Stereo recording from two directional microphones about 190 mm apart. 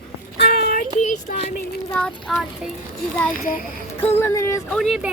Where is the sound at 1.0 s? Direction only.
40° left (ahead or behind).